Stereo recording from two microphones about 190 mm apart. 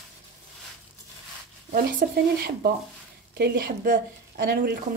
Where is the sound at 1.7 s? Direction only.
55° right (ahead or behind).